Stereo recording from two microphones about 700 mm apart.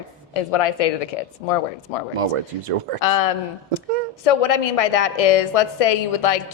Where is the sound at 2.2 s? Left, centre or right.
Right.